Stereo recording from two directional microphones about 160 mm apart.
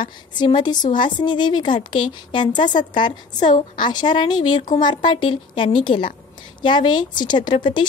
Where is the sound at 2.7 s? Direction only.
50° left (ahead or behind).